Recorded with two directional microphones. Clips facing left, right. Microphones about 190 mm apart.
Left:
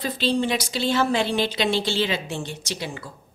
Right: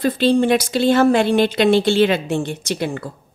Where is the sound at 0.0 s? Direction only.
55° right (ahead or behind).